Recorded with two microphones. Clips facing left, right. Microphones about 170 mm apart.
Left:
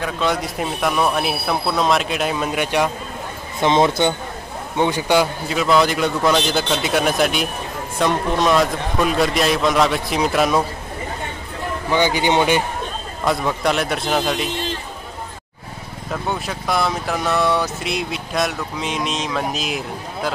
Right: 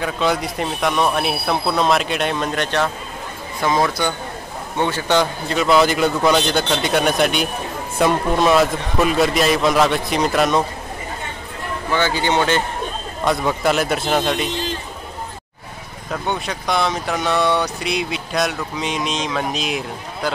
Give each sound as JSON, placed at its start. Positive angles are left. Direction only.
{"t": 0.0, "sound": "speech", "side_deg": 0}
{"t": 3.6, "sound": "speech", "side_deg": 25}
{"t": 11.9, "sound": "speech", "side_deg": 15}
{"t": 13.2, "sound": "speech", "side_deg": 0}
{"t": 16.1, "sound": "speech", "side_deg": 0}